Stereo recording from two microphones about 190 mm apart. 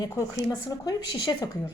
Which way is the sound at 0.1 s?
15° left (ahead or behind).